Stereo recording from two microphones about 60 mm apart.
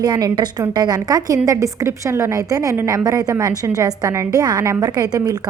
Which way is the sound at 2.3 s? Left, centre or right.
Right.